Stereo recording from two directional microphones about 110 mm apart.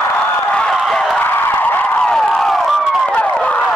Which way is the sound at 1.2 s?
20° left (ahead or behind).